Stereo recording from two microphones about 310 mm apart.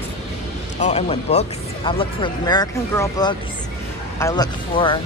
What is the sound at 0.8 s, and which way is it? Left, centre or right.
Speech, centre.